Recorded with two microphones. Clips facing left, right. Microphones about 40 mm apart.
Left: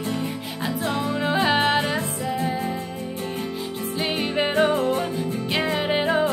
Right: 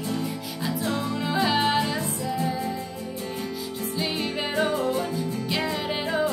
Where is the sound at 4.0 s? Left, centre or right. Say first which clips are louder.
Left 5 dB; left.